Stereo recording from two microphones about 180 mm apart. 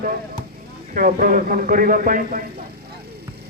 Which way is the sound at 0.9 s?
50° right (ahead or behind).